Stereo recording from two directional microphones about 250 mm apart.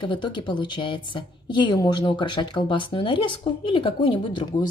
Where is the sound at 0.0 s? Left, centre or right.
Centre.